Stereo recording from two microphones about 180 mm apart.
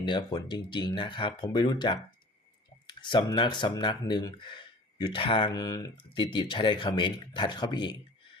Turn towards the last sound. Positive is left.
turn(degrees=25)  # may be behind; listen again after turning